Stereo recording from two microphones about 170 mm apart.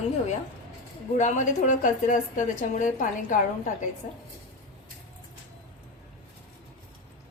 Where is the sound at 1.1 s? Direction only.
45° left (ahead or behind).